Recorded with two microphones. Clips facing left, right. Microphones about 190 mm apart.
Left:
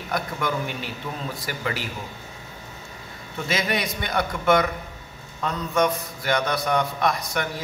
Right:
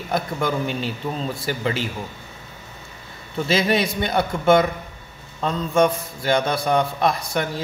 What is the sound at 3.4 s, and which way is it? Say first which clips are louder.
A man's voice: right 6 dB; 30° right (ahead or behind).